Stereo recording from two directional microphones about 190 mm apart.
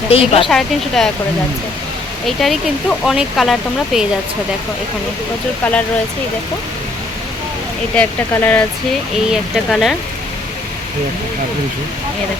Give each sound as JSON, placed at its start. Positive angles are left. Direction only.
{"t": 0.1, "sound": "a woman's voice", "side_deg": 30}
{"t": 0.4, "sound": "speech", "side_deg": 0}
{"t": 2.2, "sound": "speech", "side_deg": 0}
{"t": 7.9, "sound": "speech", "side_deg": 10}